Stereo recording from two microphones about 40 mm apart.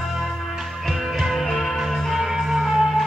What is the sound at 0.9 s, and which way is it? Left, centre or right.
Music, centre.